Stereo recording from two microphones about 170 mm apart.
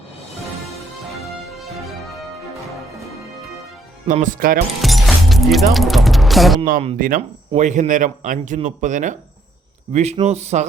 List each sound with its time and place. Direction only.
4.0 s a man's voice: 50° right (ahead or behind)
4.8 s music: centre (ahead or behind)
6.9 s a man's voice: 55° right (ahead or behind)